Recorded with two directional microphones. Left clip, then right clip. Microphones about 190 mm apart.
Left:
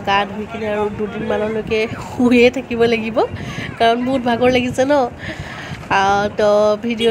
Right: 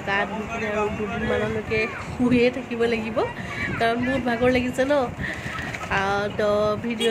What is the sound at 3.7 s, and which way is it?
Music, 25° left (ahead or behind).